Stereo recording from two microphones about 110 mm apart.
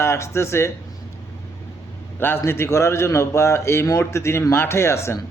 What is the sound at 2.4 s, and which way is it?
A man's voice, 25° left (ahead or behind).